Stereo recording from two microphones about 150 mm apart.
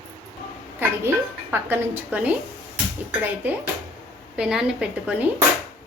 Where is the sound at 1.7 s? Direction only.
10° right (ahead or behind).